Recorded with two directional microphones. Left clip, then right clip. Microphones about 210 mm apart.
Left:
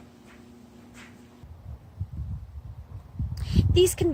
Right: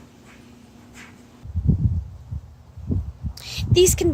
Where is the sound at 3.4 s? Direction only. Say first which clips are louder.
Right 4 dB; 5° right (ahead or behind).